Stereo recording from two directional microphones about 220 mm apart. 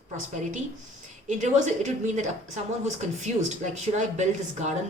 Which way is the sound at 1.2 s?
35° right (ahead or behind).